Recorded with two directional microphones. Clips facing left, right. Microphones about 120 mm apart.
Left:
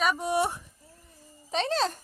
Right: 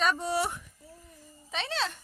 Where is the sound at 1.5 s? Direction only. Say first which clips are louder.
Left 6 dB; 40° left (ahead or behind).